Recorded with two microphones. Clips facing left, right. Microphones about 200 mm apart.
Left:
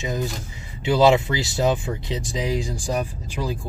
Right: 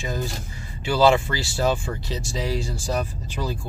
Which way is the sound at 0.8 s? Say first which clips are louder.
Left 2 dB; 20° left (ahead or behind).